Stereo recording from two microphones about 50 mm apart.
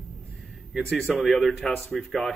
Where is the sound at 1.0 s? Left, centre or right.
Centre.